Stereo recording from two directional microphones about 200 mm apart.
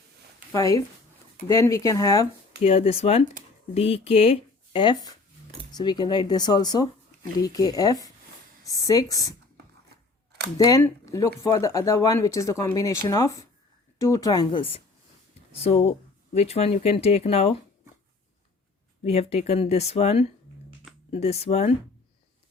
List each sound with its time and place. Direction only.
0.5 s speech: 15° left (ahead or behind)
2.6 s speech: 30° left (ahead or behind)
10.6 s speech: 15° left (ahead or behind)
19.0 s speech: 30° left (ahead or behind)